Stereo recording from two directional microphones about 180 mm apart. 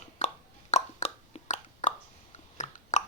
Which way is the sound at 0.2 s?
40° left (ahead or behind).